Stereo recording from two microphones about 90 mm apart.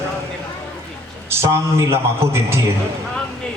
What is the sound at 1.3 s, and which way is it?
A man's voice, 30° right (ahead or behind).